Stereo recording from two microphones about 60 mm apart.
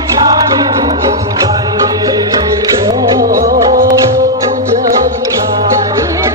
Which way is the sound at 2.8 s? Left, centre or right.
Right.